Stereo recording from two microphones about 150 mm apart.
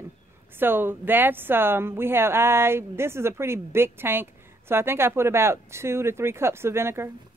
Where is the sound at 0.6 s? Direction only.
15° right (ahead or behind).